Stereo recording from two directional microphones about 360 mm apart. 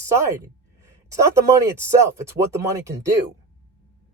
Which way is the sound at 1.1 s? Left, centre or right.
Centre.